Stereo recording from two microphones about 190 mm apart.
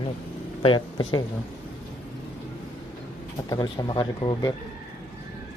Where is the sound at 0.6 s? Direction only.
25° left (ahead or behind).